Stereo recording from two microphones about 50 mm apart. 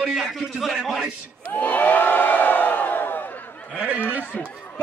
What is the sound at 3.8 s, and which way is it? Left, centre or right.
Speech, right.